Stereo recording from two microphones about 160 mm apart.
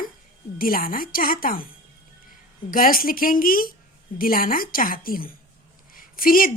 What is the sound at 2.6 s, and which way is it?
A woman's voice, 60° left (ahead or behind).